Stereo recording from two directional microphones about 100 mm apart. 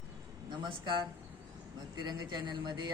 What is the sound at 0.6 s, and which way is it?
Speech, 50° right (ahead or behind).